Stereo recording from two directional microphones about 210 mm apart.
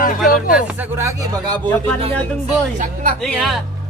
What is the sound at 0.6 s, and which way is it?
Speech, 5° right (ahead or behind).